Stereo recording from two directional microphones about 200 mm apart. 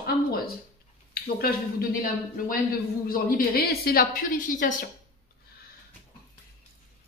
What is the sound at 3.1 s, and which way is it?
Speech, 45° left (ahead or behind).